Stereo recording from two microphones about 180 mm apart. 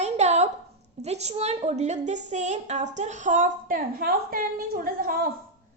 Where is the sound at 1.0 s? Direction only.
35° right (ahead or behind).